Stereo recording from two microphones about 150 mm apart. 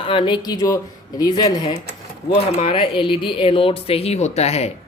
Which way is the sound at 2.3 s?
40° left (ahead or behind).